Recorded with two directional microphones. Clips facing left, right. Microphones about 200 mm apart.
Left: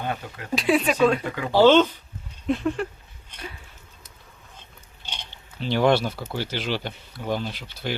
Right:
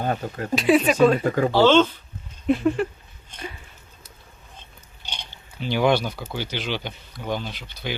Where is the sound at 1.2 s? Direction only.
40° right (ahead or behind).